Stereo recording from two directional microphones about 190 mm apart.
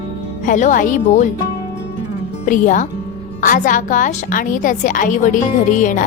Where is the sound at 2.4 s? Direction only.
40° left (ahead or behind).